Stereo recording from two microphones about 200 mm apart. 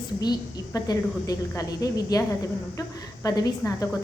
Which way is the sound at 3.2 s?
20° left (ahead or behind).